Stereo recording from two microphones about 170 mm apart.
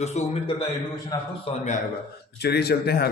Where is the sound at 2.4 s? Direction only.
70° left (ahead or behind).